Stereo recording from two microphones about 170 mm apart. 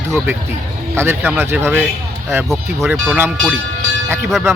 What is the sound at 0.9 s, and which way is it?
Speech, 15° right (ahead or behind).